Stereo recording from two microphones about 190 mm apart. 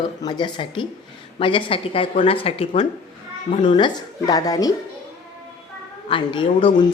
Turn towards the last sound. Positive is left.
turn(degrees=25)  # may be behind; listen again after turning